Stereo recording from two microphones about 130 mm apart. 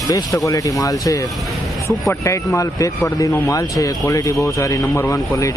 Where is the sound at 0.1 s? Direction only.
25° left (ahead or behind).